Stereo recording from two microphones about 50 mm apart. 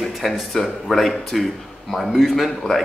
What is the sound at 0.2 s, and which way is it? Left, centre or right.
A man's voice, centre.